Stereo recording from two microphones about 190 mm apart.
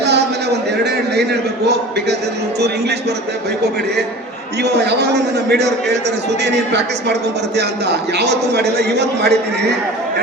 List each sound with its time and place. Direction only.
1.1 s a man's voice: 60° right (ahead or behind)
4.6 s a man's voice: 60° right (ahead or behind)
8.2 s a man's voice: 60° right (ahead or behind)